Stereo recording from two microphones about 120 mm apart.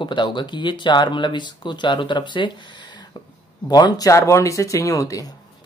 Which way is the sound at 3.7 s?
35° left (ahead or behind).